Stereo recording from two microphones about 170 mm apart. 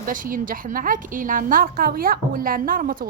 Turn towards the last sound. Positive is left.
turn(degrees=-55)  # may be behind; listen again after turning